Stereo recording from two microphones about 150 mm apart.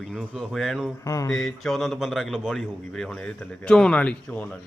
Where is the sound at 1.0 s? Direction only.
20° left (ahead or behind).